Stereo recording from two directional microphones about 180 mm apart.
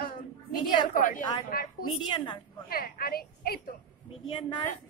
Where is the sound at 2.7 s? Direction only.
55° left (ahead or behind).